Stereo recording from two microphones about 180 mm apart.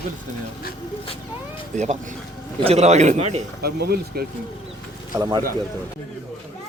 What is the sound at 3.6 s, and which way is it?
Speech, 60° right (ahead or behind).